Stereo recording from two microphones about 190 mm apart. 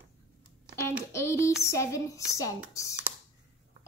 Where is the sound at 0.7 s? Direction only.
15° left (ahead or behind).